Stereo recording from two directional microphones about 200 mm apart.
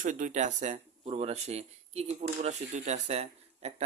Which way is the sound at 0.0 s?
40° right (ahead or behind).